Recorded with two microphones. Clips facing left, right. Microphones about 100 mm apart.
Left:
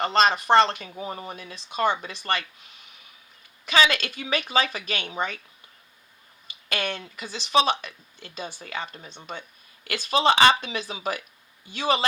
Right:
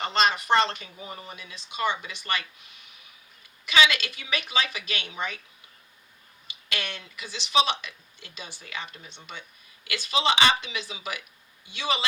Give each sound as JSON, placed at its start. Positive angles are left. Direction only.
{"t": 0.0, "sound": "speech", "side_deg": 40}
{"t": 0.5, "sound": "speech", "side_deg": 50}
{"t": 3.7, "sound": "speech", "side_deg": 40}
{"t": 6.5, "sound": "speech", "side_deg": 40}